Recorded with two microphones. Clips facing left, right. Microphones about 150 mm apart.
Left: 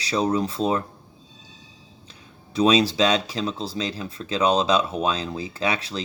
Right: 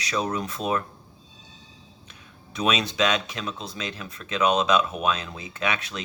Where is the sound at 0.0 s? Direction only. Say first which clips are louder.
Left 5 dB; 30° left (ahead or behind).